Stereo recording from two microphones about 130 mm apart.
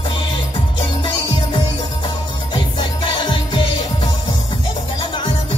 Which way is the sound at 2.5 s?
40° left (ahead or behind).